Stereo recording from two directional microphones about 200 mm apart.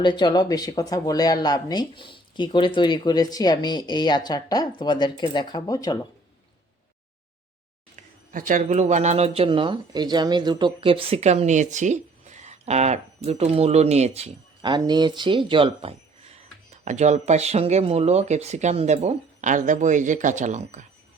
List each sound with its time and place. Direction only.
0.0 s speech: 20° left (ahead or behind)
8.3 s speech: 40° right (ahead or behind)